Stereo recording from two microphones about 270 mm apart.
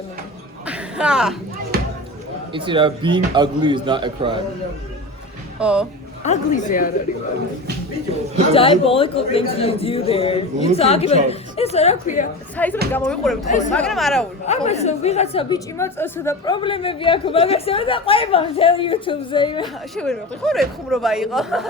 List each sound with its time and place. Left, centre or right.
0.6 s a sound: centre
1.7 s a sound: right
2.5 s a man's voice: centre
5.5 s speech: centre
6.2 s a woman's voice: left
8.5 s a woman's voice: centre
12.5 s speech: centre
14.4 s a woman's voice: left
19.6 s speech: centre